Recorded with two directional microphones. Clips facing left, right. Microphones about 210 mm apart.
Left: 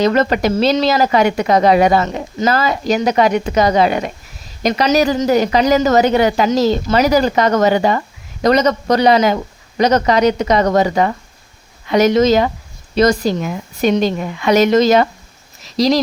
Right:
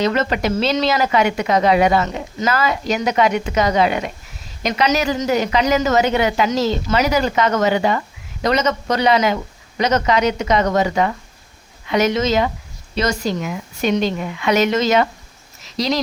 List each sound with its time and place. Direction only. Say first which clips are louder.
0.0 s a woman's voice: left 5 dB; 40° left (ahead or behind)